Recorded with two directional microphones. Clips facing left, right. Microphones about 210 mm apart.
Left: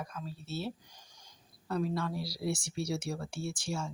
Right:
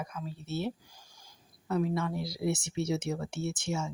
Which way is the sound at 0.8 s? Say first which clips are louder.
Right 2 dB; 10° right (ahead or behind).